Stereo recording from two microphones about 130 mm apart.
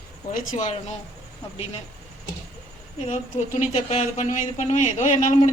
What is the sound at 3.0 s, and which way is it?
Speech, 70° left (ahead or behind).